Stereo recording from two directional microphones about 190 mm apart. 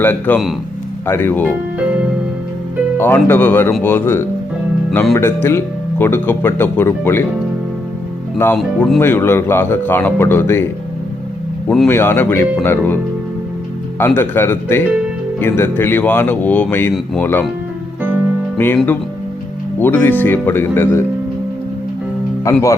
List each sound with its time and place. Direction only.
0.0 s speech: 10° left (ahead or behind)
3.0 s speech: 10° left (ahead or behind)
4.9 s speech: centre (ahead or behind)
5.1 s speech: 10° left (ahead or behind)
8.5 s speech: centre (ahead or behind)
9.0 s speech: 10° left (ahead or behind)
11.9 s speech: 10° left (ahead or behind)
14.0 s speech: 10° left (ahead or behind)
18.5 s speech: 10° left (ahead or behind)
19.8 s speech: 10° left (ahead or behind)
22.5 s speech: 15° left (ahead or behind)